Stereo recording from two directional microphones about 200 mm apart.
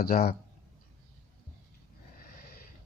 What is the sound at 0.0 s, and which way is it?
Speech, 45° left (ahead or behind).